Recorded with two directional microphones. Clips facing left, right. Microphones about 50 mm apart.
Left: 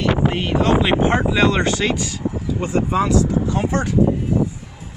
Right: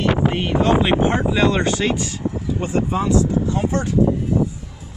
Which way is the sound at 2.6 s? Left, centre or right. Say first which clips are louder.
Left 2 dB; left.